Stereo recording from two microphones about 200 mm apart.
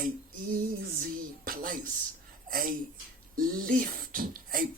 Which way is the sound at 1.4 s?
45° right (ahead or behind).